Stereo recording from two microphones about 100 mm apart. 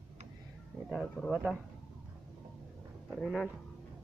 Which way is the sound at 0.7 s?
Centre (ahead or behind).